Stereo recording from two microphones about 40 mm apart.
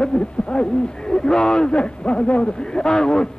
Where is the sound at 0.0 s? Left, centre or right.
Left.